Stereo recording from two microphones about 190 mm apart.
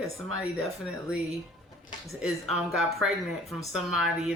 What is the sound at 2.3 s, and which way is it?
Speech, centre (ahead or behind).